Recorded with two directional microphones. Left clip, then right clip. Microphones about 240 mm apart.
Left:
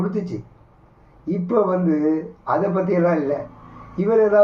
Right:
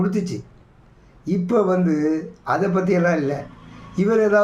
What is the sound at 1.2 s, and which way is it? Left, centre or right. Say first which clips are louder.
Speech: even; right.